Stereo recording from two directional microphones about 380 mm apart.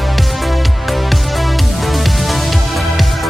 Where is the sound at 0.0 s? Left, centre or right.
Centre.